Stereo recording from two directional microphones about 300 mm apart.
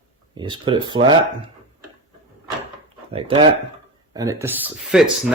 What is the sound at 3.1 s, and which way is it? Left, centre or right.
Speech, centre.